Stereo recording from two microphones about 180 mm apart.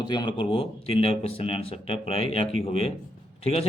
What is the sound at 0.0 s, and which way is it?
A man's voice, 25° left (ahead or behind).